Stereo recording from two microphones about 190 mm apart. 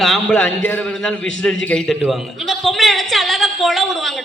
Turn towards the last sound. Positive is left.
turn(degrees=0)  # may be behind; listen again after turning